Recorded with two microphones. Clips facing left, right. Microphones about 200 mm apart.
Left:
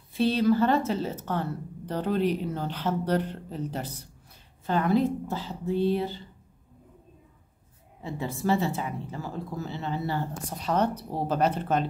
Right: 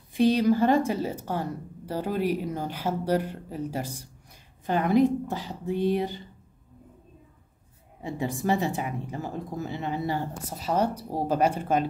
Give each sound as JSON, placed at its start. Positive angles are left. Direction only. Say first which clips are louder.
{"t": 0.1, "sound": "speech", "louder": "right 2 dB", "side_deg": -15}
{"t": 8.0, "sound": "speech", "louder": "right 2 dB", "side_deg": -15}